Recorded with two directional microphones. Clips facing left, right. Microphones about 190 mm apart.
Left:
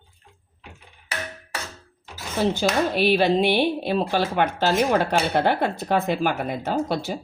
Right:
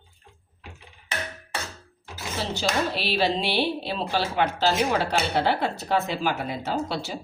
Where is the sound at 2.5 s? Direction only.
55° left (ahead or behind).